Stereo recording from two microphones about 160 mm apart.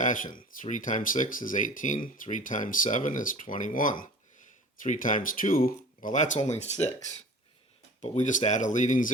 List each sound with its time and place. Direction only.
0.0 s speech: 55° left (ahead or behind)
8.0 s speech: 45° left (ahead or behind)